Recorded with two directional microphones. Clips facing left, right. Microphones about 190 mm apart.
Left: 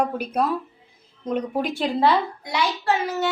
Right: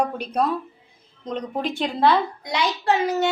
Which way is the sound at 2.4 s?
20° right (ahead or behind).